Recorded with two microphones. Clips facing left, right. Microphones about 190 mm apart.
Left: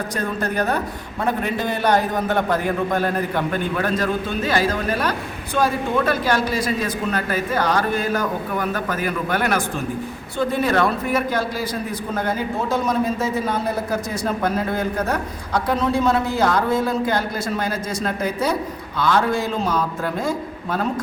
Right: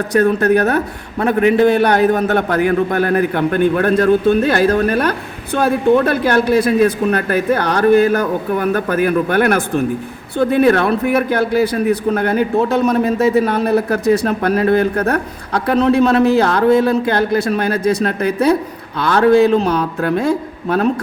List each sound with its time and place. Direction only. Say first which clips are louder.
0.1 s a woman's voice: right 12 dB; 70° right (ahead or behind)